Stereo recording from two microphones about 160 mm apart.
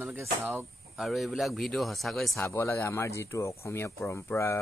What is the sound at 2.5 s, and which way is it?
Speech, 15° left (ahead or behind).